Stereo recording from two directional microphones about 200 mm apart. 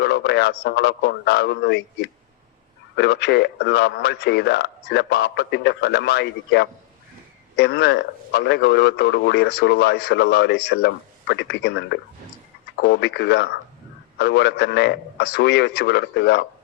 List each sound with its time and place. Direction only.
0.0 s speech: 55° left (ahead or behind)